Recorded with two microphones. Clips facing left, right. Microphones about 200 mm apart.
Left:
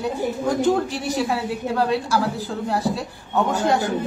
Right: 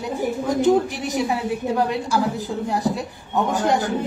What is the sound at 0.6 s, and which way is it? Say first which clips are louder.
A woman's voice: right 4 dB; 20° right (ahead or behind).